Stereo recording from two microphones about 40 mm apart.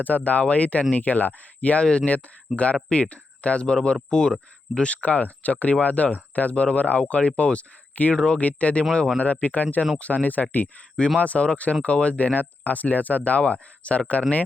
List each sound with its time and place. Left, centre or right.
0.0 s speech: left
1.8 s speech: left
2.5 s speech: centre
2.9 s speech: left
8.4 s speech: left
8.8 s speech: left
9.1 s speech: left